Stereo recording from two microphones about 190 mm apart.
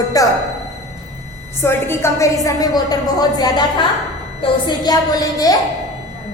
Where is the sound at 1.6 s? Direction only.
15° left (ahead or behind).